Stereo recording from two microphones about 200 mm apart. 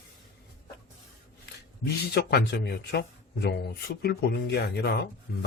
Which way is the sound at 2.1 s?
55° left (ahead or behind).